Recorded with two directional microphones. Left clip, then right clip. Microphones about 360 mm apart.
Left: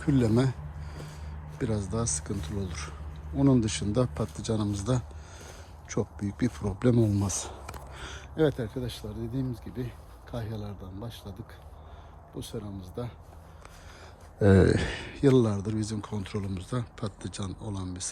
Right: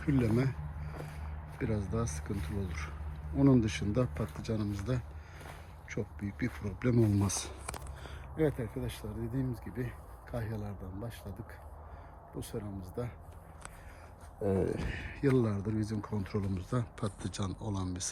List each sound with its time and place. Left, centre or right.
0.0 s speech: centre
1.5 s speech: centre
7.7 s speech: left; by 11.3 s centre
12.4 s speech: centre
14.6 s speech: left
14.9 s speech: centre